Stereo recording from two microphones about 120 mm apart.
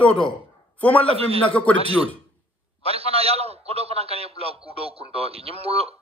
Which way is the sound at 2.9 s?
55° right (ahead or behind).